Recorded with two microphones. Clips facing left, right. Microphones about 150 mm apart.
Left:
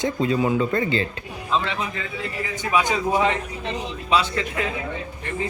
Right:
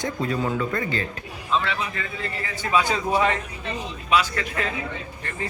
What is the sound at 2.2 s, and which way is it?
A man's voice, 15° left (ahead or behind).